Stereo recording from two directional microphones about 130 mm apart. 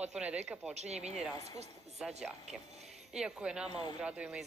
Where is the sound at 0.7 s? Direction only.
60° right (ahead or behind).